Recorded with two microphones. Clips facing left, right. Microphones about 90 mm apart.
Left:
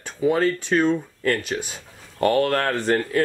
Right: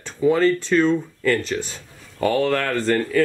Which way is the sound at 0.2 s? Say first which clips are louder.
Right 3 dB; 10° left (ahead or behind).